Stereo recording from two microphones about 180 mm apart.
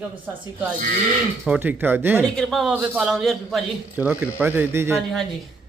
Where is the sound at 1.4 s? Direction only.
10° right (ahead or behind).